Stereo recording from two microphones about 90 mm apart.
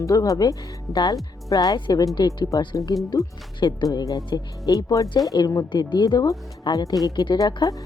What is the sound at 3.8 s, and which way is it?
Speech, 40° left (ahead or behind).